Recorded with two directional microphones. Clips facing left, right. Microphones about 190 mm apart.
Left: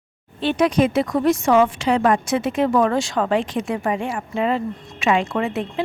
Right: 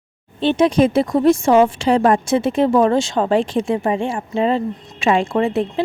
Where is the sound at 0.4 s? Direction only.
25° right (ahead or behind).